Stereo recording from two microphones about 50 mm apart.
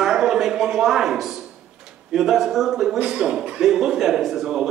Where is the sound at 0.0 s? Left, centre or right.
Centre.